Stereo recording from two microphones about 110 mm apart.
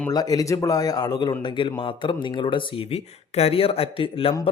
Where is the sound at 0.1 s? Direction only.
35° left (ahead or behind).